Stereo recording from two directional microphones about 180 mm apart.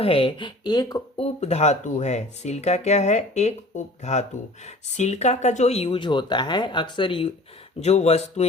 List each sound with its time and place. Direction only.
0.0 s speech: 30° left (ahead or behind)
1.2 s speech: 35° left (ahead or behind)
7.8 s speech: 40° left (ahead or behind)